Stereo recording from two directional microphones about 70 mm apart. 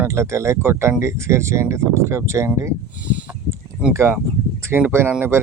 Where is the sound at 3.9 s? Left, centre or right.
Right.